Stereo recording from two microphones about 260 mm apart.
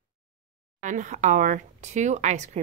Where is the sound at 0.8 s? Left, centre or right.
Right.